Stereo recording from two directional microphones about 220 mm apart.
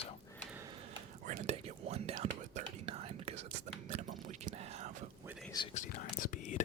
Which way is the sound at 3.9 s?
35° right (ahead or behind).